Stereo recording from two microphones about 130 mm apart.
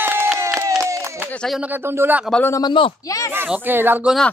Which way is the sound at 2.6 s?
40° left (ahead or behind).